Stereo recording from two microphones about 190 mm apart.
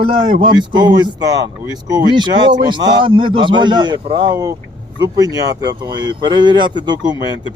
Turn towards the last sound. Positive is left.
turn(degrees=-25)  # may be behind; listen again after turning